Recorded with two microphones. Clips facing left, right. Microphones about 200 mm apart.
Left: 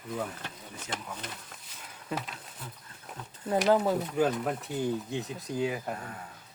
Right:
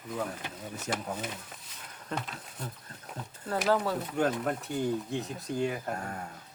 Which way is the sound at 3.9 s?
Centre (ahead or behind).